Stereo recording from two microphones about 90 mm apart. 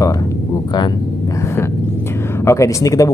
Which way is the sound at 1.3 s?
30° left (ahead or behind).